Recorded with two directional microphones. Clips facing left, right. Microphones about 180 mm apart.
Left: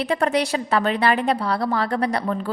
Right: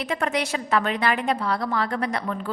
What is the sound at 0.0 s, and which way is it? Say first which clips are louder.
A woman's voice: left 5 dB; 35° left (ahead or behind).